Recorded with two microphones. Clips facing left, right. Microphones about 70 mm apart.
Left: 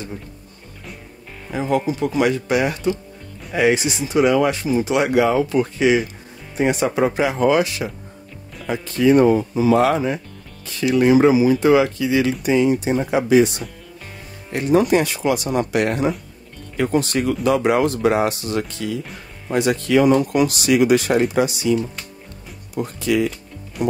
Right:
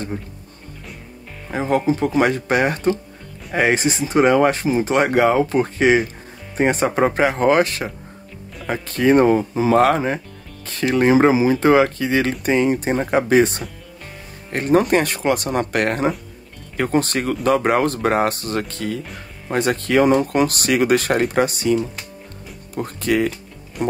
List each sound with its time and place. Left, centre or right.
1.5 s speech: right
22.8 s speech: right